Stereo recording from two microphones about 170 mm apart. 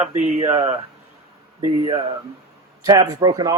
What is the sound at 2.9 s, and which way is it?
Speech, 20° right (ahead or behind).